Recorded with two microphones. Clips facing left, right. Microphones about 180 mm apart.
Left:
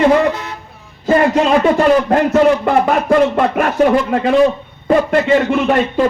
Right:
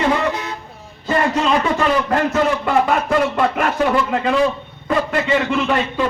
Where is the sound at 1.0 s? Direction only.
45° left (ahead or behind).